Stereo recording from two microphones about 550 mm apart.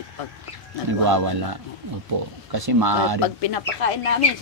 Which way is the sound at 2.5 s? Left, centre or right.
Right.